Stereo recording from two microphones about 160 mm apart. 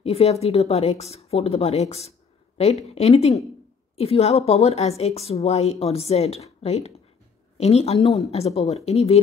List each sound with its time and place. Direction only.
0.0 s speech: 40° left (ahead or behind)